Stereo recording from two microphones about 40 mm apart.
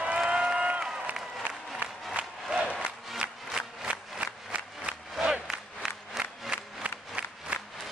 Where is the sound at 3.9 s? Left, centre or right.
Right.